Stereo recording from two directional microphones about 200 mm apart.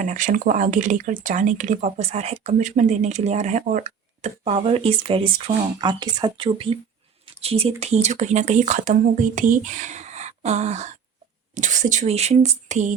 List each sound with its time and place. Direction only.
0.0 s speech: 40° right (ahead or behind)